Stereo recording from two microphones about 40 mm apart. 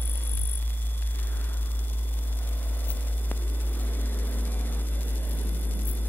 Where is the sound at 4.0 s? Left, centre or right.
Left.